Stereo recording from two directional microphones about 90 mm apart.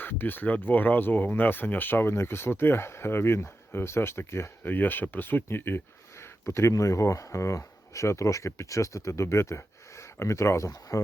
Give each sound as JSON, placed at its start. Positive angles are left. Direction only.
{"t": 0.0, "sound": "speech", "side_deg": 20}